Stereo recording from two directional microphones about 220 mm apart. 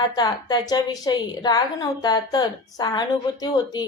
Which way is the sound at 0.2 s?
20° left (ahead or behind).